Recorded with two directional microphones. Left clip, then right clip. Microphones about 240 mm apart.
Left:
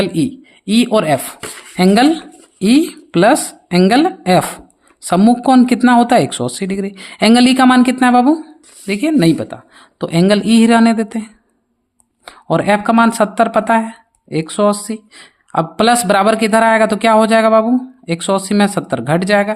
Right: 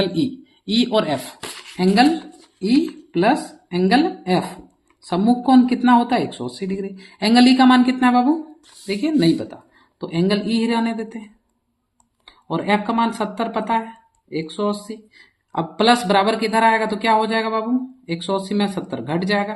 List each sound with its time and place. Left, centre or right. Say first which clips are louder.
0.0 s speech: left 4 dB; left
12.2 s speech: left 9 dB; left